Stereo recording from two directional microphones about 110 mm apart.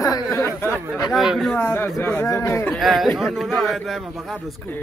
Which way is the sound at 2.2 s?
25° left (ahead or behind).